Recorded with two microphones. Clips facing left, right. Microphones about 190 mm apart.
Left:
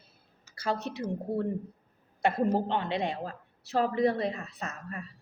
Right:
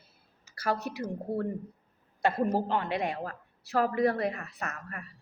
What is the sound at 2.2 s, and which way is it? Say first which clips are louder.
A woman's voice: left 1 dB; 20° left (ahead or behind).